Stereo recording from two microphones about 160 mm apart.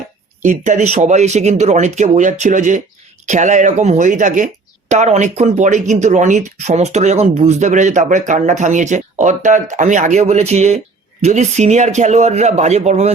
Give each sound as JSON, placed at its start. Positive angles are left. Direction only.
{"t": 0.4, "sound": "speech", "side_deg": -50}